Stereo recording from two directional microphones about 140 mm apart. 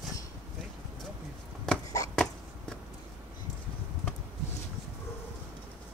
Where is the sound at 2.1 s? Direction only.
5° left (ahead or behind).